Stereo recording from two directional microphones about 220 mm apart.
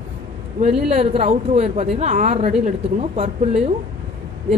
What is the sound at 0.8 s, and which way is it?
A woman's voice, 30° right (ahead or behind).